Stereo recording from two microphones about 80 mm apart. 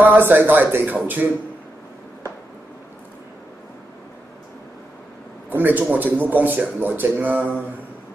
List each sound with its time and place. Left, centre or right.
0.0 s a man's voice: right
5.5 s a man's voice: right